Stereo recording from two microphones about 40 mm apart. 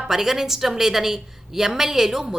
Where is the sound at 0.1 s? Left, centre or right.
Centre.